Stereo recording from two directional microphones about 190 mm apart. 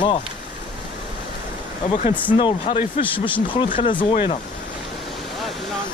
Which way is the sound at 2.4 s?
30° left (ahead or behind).